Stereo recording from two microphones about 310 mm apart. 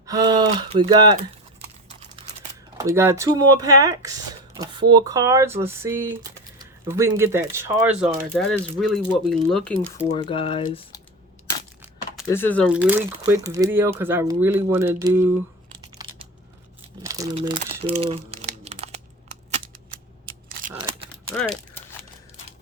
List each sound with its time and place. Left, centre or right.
0.0 s speech: centre
2.8 s speech: centre
10.1 s speech: centre
12.3 s speech: centre
17.0 s crumpling: centre
21.3 s crumpling: centre